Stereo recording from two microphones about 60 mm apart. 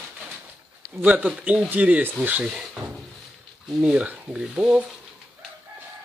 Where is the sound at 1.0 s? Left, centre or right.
Right.